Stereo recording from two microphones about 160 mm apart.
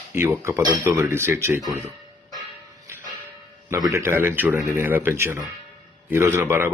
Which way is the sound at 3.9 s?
15° right (ahead or behind).